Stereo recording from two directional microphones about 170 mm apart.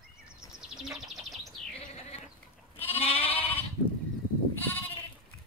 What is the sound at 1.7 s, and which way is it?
Insect, 40° left (ahead or behind).